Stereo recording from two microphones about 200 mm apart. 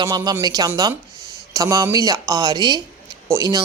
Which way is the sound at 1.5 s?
15° right (ahead or behind).